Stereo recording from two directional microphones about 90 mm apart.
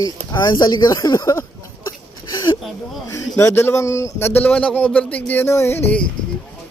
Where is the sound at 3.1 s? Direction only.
35° left (ahead or behind).